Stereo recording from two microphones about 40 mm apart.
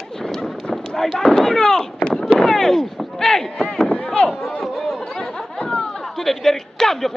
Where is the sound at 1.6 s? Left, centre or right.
Centre.